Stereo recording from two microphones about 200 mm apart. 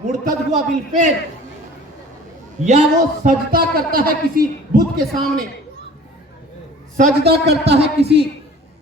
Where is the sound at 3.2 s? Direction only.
45° right (ahead or behind).